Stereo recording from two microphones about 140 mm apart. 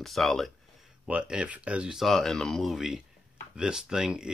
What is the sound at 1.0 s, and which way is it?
Speech, 10° right (ahead or behind).